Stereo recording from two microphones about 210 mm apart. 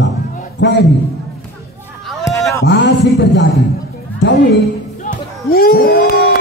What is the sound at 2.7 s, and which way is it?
A man's voice, 55° left (ahead or behind).